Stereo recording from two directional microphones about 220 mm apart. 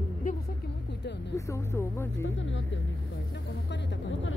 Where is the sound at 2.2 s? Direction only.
55° left (ahead or behind).